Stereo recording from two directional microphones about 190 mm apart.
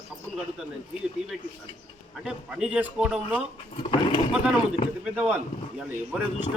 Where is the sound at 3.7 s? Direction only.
25° left (ahead or behind).